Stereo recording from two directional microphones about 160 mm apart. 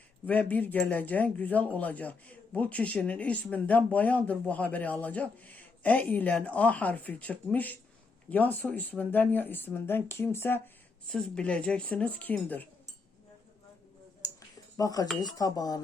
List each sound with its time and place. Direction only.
0.3 s a man's voice: 10° left (ahead or behind)
14.8 s speech: 20° left (ahead or behind)